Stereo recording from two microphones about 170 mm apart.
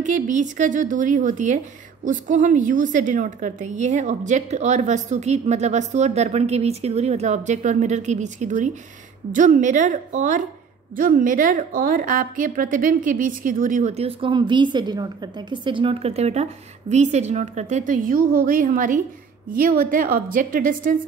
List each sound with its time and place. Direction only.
0.0 s a woman's voice: 45° right (ahead or behind)